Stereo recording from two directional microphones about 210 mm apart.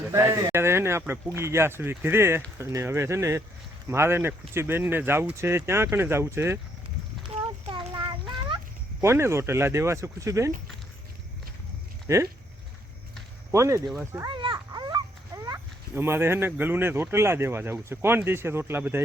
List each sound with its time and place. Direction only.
0.1 s speech: 10° right (ahead or behind)
7.7 s child singing: 25° right (ahead or behind)
9.0 s speech: 10° right (ahead or behind)
12.0 s speech: 15° right (ahead or behind)
13.5 s speech: 15° right (ahead or behind)
13.8 s speech: centre (ahead or behind)
14.1 s children playing: 15° right (ahead or behind)
15.4 s speech: 10° right (ahead or behind)